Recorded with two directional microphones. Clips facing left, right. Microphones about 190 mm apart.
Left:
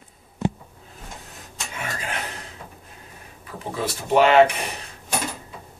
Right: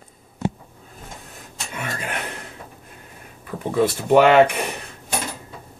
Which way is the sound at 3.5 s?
50° right (ahead or behind).